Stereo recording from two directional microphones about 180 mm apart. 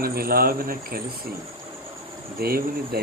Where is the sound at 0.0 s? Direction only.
55° right (ahead or behind).